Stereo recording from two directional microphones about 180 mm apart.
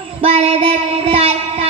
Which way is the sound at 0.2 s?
35° right (ahead or behind).